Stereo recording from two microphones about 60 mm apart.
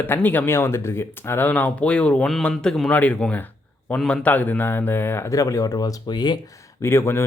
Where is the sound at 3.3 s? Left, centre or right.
Left.